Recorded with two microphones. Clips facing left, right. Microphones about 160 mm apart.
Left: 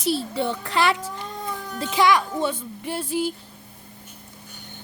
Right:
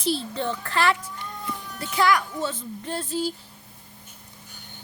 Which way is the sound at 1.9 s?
20° left (ahead or behind).